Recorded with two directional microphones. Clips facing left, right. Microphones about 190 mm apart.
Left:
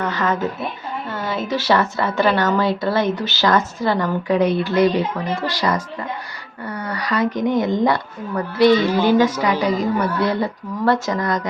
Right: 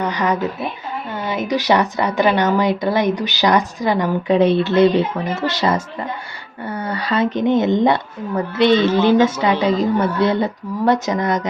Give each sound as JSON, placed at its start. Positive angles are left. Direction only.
{"t": 0.0, "sound": "a sound", "side_deg": -15}
{"t": 1.1, "sound": "a woman's voice", "side_deg": -20}
{"t": 4.4, "sound": "a woman's voice", "side_deg": -25}
{"t": 8.9, "sound": "a woman's voice", "side_deg": 10}
{"t": 9.1, "sound": "a woman's voice", "side_deg": -25}